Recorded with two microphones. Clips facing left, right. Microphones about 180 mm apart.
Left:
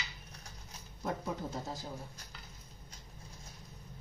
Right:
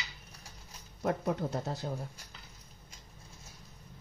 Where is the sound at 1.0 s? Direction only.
65° right (ahead or behind).